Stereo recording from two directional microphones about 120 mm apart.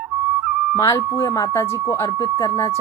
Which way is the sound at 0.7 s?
30° left (ahead or behind).